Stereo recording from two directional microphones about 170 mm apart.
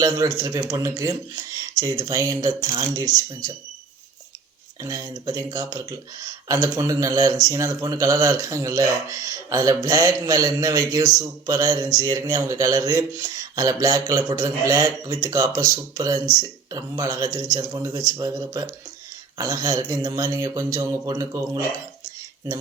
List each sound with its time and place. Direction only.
0.0 s speech: 20° right (ahead or behind)
4.8 s speech: 20° right (ahead or behind)